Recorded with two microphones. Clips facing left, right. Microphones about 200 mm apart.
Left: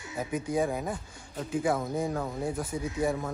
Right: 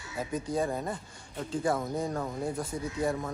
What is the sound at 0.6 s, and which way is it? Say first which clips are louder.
A man's voice: left 1 dB; 5° left (ahead or behind).